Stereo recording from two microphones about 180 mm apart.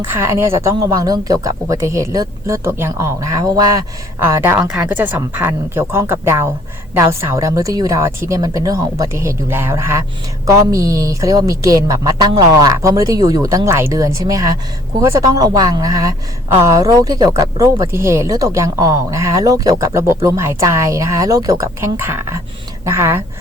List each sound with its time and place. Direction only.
0.1 s a woman's voice: 15° right (ahead or behind)